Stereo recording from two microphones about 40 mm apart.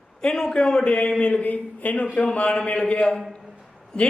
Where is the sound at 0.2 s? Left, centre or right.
Centre.